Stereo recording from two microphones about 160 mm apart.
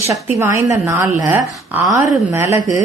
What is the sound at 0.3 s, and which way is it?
A woman's voice, 20° right (ahead or behind).